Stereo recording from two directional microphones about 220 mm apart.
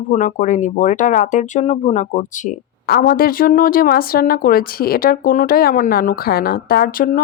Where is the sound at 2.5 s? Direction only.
40° left (ahead or behind).